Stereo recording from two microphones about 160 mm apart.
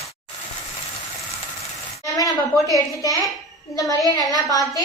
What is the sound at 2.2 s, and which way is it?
A woman's voice, 20° left (ahead or behind).